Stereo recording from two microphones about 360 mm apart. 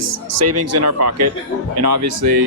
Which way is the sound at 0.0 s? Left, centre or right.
Right.